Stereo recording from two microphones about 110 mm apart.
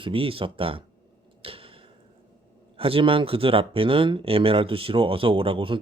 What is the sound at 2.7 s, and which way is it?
Speech, 55° right (ahead or behind).